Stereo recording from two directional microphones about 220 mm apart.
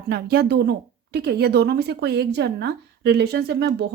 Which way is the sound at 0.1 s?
45° right (ahead or behind).